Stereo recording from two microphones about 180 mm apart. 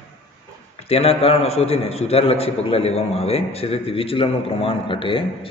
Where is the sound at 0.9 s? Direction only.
35° left (ahead or behind).